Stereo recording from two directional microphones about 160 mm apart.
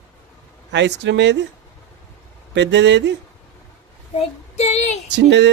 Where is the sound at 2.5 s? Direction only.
90° right.